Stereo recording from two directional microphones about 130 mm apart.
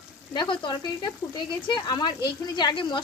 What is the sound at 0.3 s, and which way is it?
Speech, 35° left (ahead or behind).